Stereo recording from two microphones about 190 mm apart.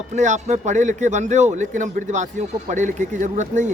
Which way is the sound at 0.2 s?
40° right (ahead or behind).